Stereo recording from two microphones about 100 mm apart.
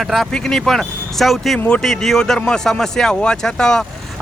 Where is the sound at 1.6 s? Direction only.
15° left (ahead or behind).